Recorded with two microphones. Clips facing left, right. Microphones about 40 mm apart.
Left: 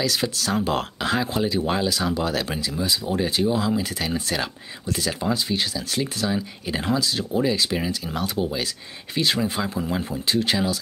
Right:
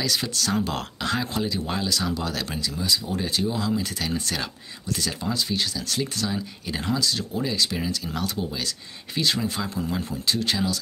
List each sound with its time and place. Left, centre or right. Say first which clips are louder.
0.0 s speech: left 2 dB; centre